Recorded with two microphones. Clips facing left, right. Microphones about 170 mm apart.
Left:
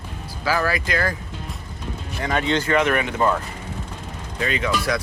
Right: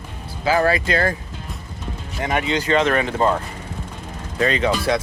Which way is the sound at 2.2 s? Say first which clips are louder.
Even; 20° right (ahead or behind).